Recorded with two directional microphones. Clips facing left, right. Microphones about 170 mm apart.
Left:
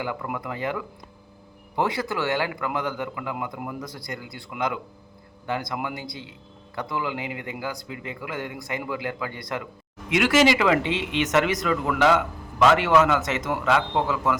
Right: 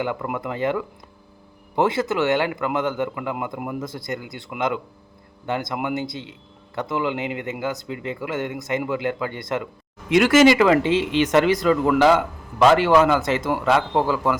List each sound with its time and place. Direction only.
0.3 s speech: 25° right (ahead or behind)
10.1 s speech: 40° right (ahead or behind)